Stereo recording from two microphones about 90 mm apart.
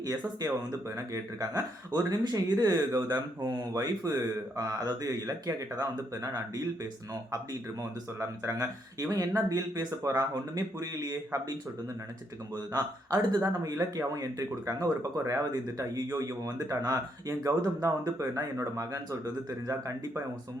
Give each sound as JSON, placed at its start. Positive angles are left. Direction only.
{"t": 0.9, "sound": "speech", "side_deg": -35}
{"t": 1.9, "sound": "speech", "side_deg": -50}
{"t": 7.8, "sound": "speech", "side_deg": -35}
{"t": 12.7, "sound": "speech", "side_deg": -50}